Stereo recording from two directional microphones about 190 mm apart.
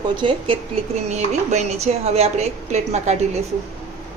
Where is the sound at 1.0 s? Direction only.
35° right (ahead or behind).